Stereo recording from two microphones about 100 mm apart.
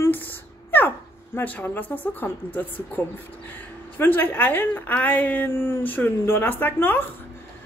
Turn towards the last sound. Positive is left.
turn(degrees=20)  # may be behind; listen again after turning